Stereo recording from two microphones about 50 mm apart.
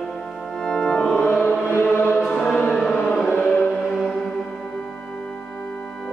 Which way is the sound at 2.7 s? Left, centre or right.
Centre.